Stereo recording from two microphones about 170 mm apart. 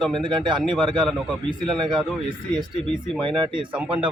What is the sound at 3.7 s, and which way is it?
Speech, 10° right (ahead or behind).